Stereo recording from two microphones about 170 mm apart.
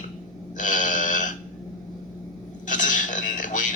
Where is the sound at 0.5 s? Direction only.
50° left (ahead or behind).